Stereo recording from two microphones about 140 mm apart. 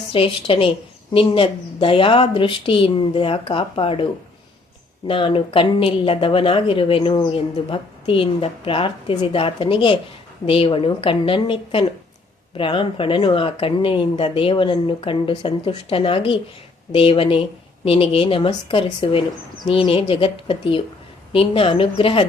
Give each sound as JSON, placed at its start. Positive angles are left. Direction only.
{"t": 0.1, "sound": "speech", "side_deg": 40}